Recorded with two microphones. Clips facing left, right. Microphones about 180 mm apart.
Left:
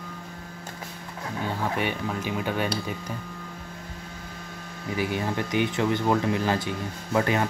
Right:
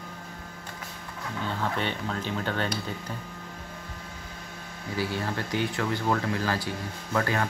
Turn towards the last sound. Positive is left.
turn(degrees=20)  # may be behind; listen again after turning